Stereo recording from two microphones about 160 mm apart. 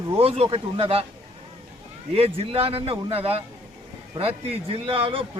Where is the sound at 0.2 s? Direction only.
35° right (ahead or behind).